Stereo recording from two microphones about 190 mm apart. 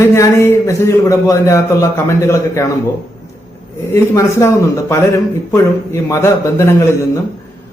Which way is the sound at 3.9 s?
15° left (ahead or behind).